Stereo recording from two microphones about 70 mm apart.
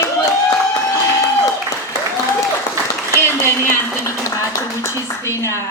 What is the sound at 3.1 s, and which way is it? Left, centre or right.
A woman's voice, left.